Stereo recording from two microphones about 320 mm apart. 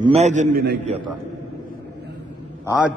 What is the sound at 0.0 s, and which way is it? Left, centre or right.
Speech, centre.